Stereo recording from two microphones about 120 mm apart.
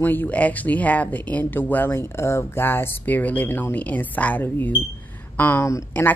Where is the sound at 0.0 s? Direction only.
15° left (ahead or behind).